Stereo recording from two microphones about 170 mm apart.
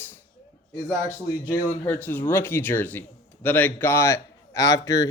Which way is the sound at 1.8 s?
10° left (ahead or behind).